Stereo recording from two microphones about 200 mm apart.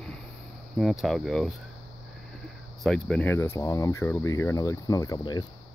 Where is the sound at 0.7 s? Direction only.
Centre (ahead or behind).